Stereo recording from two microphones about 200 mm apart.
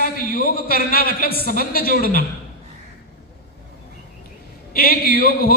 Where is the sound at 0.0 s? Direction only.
50° left (ahead or behind).